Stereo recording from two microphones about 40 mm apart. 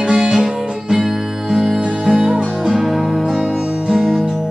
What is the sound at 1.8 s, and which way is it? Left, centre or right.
Music, right.